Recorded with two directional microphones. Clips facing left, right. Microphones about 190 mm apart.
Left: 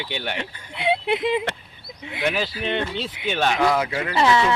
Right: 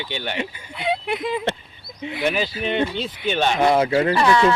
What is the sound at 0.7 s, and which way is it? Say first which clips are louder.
Speech: left 2 dB; 25° left (ahead or behind).